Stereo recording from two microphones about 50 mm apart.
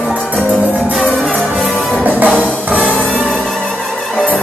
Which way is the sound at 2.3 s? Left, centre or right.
Right.